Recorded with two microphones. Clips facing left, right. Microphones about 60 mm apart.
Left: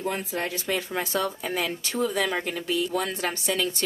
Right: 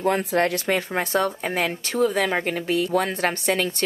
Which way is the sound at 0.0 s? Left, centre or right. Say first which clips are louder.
Right 8 dB; right.